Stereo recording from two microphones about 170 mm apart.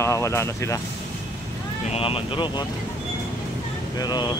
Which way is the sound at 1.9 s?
35° left (ahead or behind).